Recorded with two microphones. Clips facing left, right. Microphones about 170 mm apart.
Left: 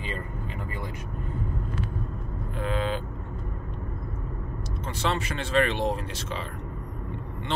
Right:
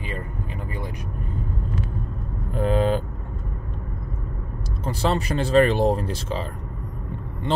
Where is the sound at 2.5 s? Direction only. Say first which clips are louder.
Right 8 dB; 40° right (ahead or behind).